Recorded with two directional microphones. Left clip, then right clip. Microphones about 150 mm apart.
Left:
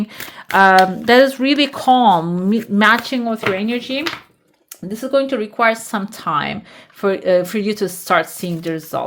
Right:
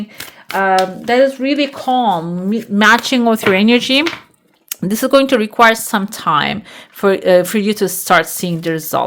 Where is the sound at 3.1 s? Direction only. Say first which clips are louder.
Right 8 dB; 30° right (ahead or behind).